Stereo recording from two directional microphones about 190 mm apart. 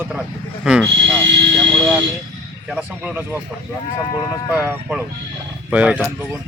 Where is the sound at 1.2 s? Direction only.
65° right (ahead or behind).